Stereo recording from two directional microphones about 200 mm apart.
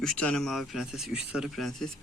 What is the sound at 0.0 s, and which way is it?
Speech, 5° left (ahead or behind).